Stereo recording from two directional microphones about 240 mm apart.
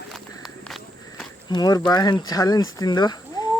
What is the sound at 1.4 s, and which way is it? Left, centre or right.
Speech, centre.